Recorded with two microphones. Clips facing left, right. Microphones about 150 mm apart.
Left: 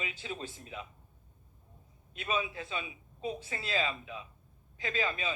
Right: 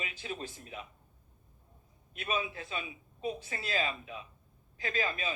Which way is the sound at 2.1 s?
25° left (ahead or behind).